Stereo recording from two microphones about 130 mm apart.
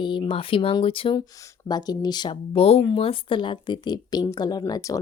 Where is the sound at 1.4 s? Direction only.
30° left (ahead or behind).